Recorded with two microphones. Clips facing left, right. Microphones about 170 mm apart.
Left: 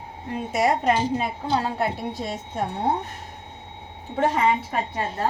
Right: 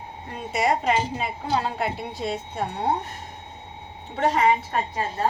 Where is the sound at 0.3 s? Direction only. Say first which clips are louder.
Left 1 dB; 50° left (ahead or behind).